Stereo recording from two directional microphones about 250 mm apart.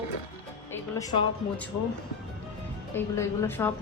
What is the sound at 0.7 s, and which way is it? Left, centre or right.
Music, centre.